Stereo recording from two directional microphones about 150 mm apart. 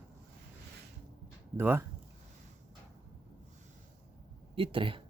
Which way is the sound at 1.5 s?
15° right (ahead or behind).